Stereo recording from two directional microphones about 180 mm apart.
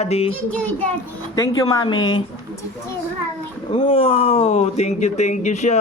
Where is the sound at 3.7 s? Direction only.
30° left (ahead or behind).